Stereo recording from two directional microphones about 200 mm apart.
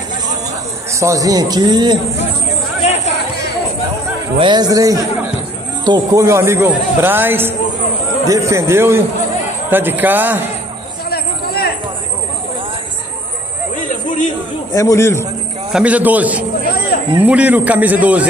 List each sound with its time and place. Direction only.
0.9 s a man's voice: 15° right (ahead or behind)
4.4 s a man's voice: 20° right (ahead or behind)
11.1 s a sound: 50° left (ahead or behind)
14.7 s a man's voice: 15° left (ahead or behind)
15.7 s a man's voice: 5° right (ahead or behind)